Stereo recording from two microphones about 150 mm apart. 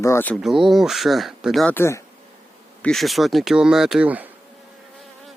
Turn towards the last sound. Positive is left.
turn(degrees=-10)  # may be behind; listen again after turning